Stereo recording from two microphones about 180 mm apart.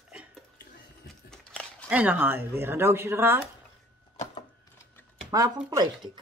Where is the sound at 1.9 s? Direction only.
10° right (ahead or behind).